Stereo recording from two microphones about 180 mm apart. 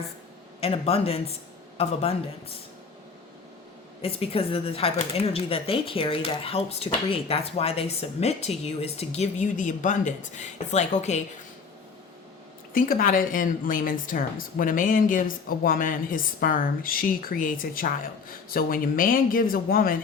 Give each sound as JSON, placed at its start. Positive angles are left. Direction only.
{"t": 0.6, "sound": "speech", "side_deg": 30}
{"t": 4.0, "sound": "speech", "side_deg": 30}
{"t": 12.7, "sound": "a woman's voice", "side_deg": 50}